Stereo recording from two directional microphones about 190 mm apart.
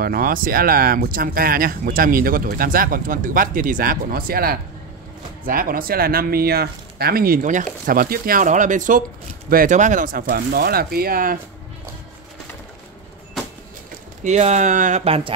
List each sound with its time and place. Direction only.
0.0 s speech: 50° right (ahead or behind)
14.2 s speech: 35° right (ahead or behind)